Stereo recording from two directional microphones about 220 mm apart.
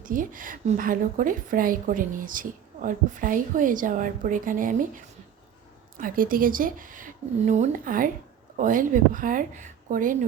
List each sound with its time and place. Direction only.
0.0 s a woman's voice: 40° right (ahead or behind)
6.0 s a woman's voice: 40° right (ahead or behind)